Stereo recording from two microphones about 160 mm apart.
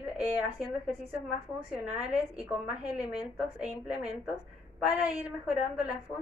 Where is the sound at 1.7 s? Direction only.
5° right (ahead or behind).